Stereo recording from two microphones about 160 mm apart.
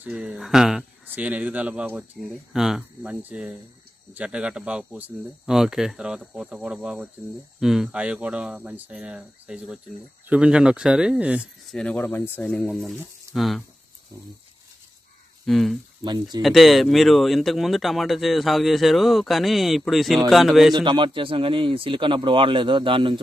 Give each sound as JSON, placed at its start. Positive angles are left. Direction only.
{"t": 0.0, "sound": "speech", "side_deg": -5}
{"t": 11.7, "sound": "speech", "side_deg": 5}
{"t": 15.4, "sound": "speech", "side_deg": 0}
{"t": 16.0, "sound": "speech", "side_deg": -25}
{"t": 16.4, "sound": "speech", "side_deg": 0}
{"t": 20.7, "sound": "a man's voice", "side_deg": -30}